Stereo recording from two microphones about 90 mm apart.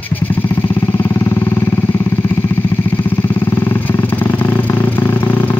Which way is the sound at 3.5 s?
20° left (ahead or behind).